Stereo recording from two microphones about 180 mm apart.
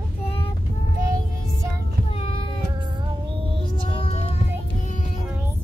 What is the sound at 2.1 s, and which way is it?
Child singing, 30° left (ahead or behind).